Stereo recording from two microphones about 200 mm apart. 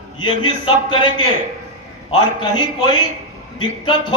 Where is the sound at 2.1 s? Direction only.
25° left (ahead or behind).